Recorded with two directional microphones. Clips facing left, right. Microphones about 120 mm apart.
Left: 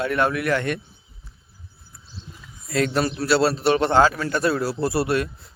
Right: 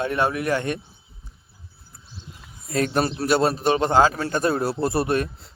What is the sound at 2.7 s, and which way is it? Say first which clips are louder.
Speech: left 1 dB; 30° right (ahead or behind).